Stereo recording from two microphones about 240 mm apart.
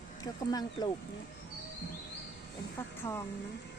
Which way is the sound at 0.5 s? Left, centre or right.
Centre.